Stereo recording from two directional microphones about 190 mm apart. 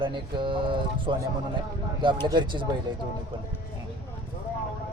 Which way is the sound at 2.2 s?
25° right (ahead or behind).